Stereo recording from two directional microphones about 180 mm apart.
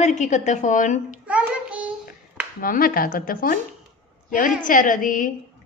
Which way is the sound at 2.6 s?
50° left (ahead or behind).